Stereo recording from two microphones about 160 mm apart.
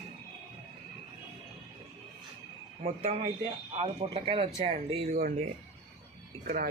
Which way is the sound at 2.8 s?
45° right (ahead or behind).